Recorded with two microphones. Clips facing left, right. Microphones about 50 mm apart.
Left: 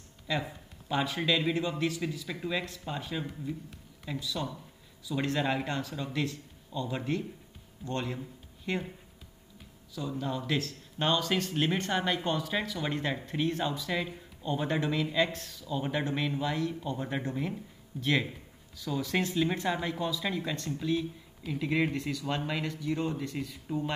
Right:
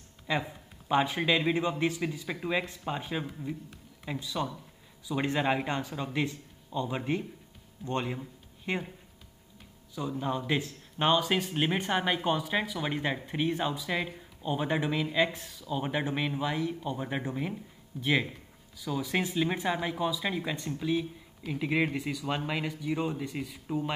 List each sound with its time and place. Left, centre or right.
0.3 s a man's voice: right
9.9 s speech: right